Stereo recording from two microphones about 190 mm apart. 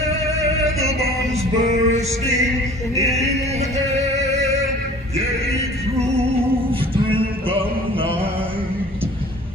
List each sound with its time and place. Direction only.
1.3 s music: 35° right (ahead or behind)
6.7 s music: 30° right (ahead or behind)